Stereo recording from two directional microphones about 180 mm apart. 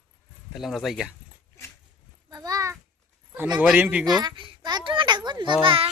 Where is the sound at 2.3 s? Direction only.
20° right (ahead or behind).